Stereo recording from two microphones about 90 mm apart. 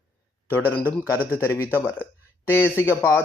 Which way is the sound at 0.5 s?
20° left (ahead or behind).